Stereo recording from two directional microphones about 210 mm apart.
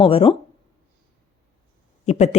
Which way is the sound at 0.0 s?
25° left (ahead or behind).